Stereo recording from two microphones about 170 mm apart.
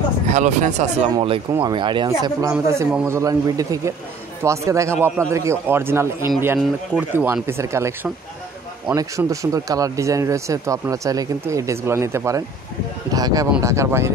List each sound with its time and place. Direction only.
0.3 s speech: 45° right (ahead or behind)
1.1 s a man's voice: 30° right (ahead or behind); by 14.1 s 15° right (ahead or behind)